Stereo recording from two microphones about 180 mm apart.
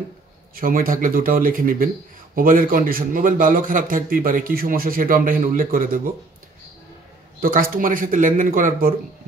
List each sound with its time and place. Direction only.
0.6 s a man's voice: 50° right (ahead or behind)
7.3 s a man's voice: 50° right (ahead or behind)